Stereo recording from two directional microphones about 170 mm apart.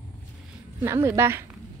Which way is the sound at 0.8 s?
15° right (ahead or behind).